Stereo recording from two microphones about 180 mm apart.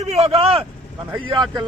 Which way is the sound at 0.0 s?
35° right (ahead or behind).